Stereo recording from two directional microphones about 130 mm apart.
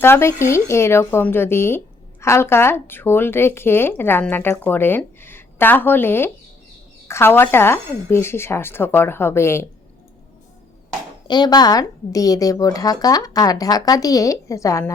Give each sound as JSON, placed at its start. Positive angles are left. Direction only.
{"t": 0.0, "sound": "speech", "side_deg": 20}
{"t": 11.3, "sound": "speech", "side_deg": 30}